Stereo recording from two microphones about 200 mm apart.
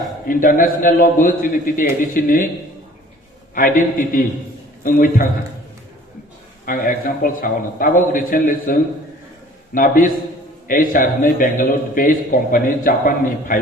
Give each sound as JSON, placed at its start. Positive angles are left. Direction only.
{"t": 0.3, "sound": "a man's voice", "side_deg": 45}
{"t": 3.5, "sound": "a man's voice", "side_deg": 40}
{"t": 6.7, "sound": "a man's voice", "side_deg": 45}